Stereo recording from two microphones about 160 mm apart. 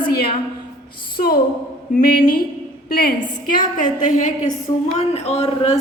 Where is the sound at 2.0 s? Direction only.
65° left (ahead or behind).